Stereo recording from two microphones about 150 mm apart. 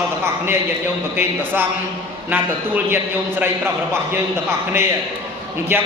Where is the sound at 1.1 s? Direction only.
15° right (ahead or behind).